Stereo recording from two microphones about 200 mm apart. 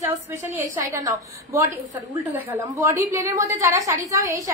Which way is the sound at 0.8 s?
15° right (ahead or behind).